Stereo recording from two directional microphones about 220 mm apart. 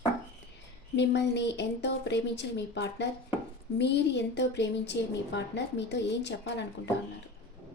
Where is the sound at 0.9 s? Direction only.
50° left (ahead or behind).